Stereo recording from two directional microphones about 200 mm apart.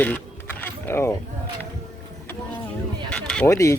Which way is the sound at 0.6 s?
10° left (ahead or behind).